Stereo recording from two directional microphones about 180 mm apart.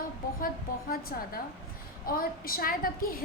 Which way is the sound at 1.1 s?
55° left (ahead or behind).